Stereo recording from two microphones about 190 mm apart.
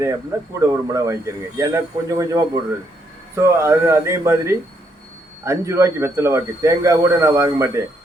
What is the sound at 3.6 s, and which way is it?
Speech, 15° right (ahead or behind).